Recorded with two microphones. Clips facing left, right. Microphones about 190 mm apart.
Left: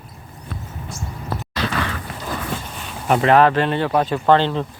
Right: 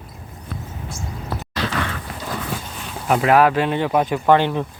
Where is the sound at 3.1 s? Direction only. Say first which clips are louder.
Left 1 dB; 5° right (ahead or behind).